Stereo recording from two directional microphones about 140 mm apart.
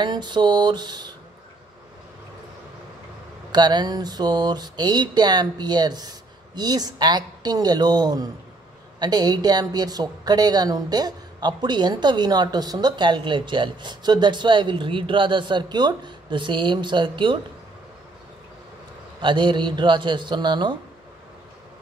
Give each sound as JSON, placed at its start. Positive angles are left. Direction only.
{"t": 0.0, "sound": "a woman's voice", "side_deg": -30}
{"t": 3.5, "sound": "a sound", "side_deg": -30}
{"t": 9.0, "sound": "a woman's voice", "side_deg": -30}
{"t": 19.2, "sound": "a woman's voice", "side_deg": -35}